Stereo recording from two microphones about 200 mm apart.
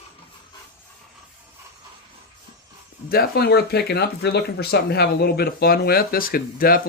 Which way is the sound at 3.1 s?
50° left (ahead or behind).